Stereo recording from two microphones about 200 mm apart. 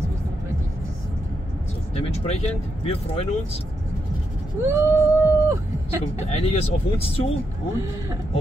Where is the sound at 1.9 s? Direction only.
30° left (ahead or behind).